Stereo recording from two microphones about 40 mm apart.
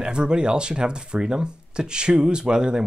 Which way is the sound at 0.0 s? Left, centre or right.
Right.